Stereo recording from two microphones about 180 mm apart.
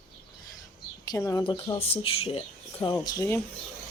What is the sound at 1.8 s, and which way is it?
Speech, 30° left (ahead or behind).